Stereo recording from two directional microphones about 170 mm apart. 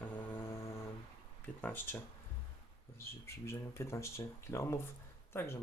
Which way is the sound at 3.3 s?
15° left (ahead or behind).